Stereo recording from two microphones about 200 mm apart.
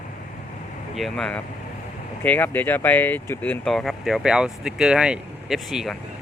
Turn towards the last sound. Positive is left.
turn(degrees=0)  # may be behind; listen again after turning